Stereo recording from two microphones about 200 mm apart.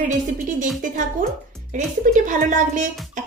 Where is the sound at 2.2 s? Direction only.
40° right (ahead or behind).